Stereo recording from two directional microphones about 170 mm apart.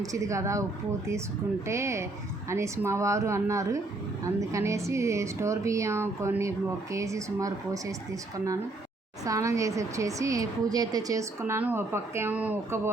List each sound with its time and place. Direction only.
0.0 s speech: 20° right (ahead or behind)
1.6 s speech: 15° right (ahead or behind)
9.2 s speech: 20° right (ahead or behind)